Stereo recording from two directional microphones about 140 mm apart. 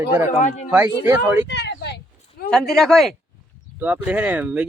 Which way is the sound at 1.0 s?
15° right (ahead or behind).